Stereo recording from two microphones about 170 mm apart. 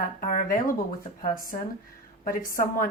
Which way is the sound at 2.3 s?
55° left (ahead or behind).